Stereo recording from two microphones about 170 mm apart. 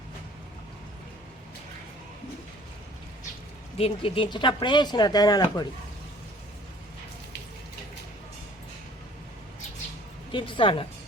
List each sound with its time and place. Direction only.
3.8 s speech: 35° left (ahead or behind)
10.3 s speech: 30° left (ahead or behind)